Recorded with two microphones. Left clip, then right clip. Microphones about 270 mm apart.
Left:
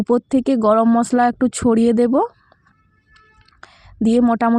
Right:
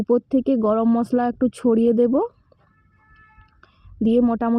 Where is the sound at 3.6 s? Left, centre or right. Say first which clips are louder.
Left 3 dB; left.